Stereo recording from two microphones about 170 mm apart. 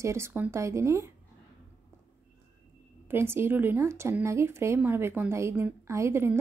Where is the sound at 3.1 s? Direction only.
15° right (ahead or behind).